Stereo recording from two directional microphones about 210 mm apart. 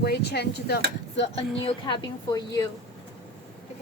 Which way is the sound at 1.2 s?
25° left (ahead or behind).